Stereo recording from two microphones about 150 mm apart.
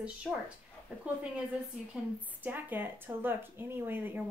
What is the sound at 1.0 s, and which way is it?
A woman's voice, 10° right (ahead or behind).